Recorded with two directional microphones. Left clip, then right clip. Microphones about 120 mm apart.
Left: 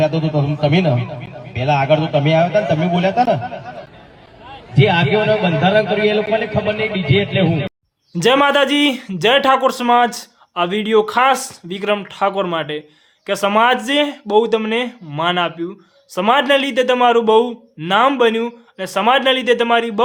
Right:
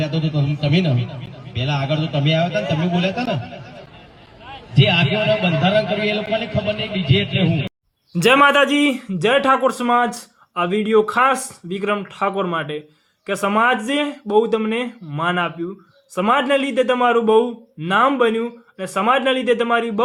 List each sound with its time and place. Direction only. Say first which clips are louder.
0.0 s a man's voice: left 7 dB; 15° right (ahead or behind)
8.2 s a man's voice: even; 40° left (ahead or behind)
8.6 s speech: left 2 dB; 25° left (ahead or behind)